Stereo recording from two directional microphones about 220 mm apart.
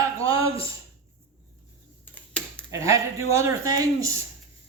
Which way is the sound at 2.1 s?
5° left (ahead or behind).